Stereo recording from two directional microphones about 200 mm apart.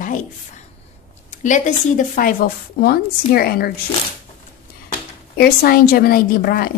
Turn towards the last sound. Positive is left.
turn(degrees=50)  # may be behind; listen again after turning